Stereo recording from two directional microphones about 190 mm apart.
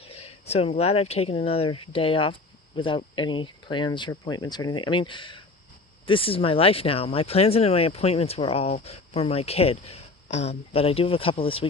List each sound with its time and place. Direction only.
0.0 s speech: 30° left (ahead or behind)